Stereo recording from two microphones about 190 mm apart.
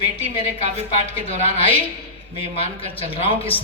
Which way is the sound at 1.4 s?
30° left (ahead or behind).